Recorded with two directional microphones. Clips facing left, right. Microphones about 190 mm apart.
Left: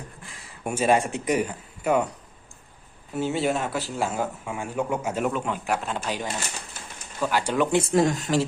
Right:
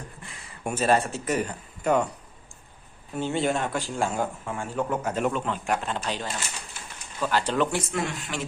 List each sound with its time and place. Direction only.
0.2 s a sound: centre (ahead or behind)
0.7 s speech: 10° left (ahead or behind)
3.2 s speech: 5° left (ahead or behind)
7.8 s speech: 35° left (ahead or behind)